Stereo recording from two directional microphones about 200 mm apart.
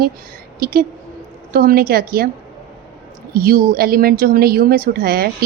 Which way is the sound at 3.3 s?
45° right (ahead or behind).